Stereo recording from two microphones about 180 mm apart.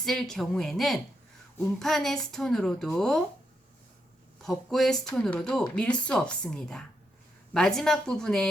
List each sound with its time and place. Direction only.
0.0 s speech: centre (ahead or behind)
4.4 s speech: centre (ahead or behind)